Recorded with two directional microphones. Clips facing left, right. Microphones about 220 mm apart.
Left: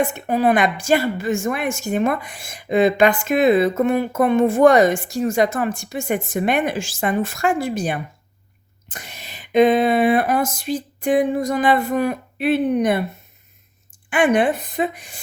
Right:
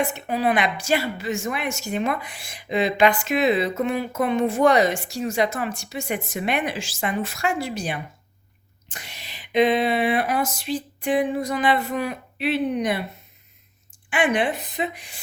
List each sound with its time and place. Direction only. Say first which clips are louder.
0.3 s a woman's voice: left 6 dB; 50° left (ahead or behind)
14.1 s a woman's voice: left 5 dB; 45° left (ahead or behind)